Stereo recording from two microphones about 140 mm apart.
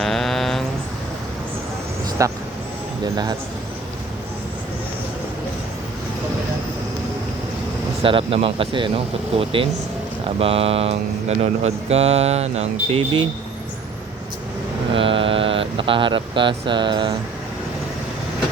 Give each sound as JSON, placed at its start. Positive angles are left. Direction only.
{"t": 0.0, "sound": "a sound", "side_deg": 0}
{"t": 2.2, "sound": "a man's voice", "side_deg": -25}
{"t": 8.0, "sound": "speech", "side_deg": -40}
{"t": 14.9, "sound": "mantra", "side_deg": -40}